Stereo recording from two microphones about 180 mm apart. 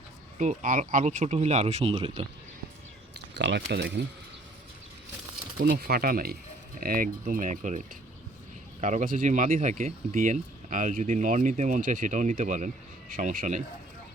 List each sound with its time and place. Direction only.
0.3 s speech: 45° right (ahead or behind)
3.2 s speech: 70° right (ahead or behind)
5.5 s speech: 55° right (ahead or behind)